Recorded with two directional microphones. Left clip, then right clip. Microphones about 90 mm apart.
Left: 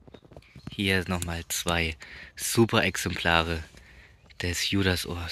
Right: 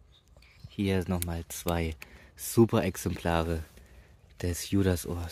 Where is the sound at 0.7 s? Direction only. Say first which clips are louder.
Left 4 dB; 20° right (ahead or behind).